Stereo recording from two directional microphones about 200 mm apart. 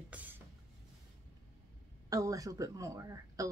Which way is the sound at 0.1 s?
10° right (ahead or behind).